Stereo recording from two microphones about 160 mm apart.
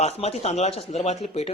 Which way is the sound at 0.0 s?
40° left (ahead or behind).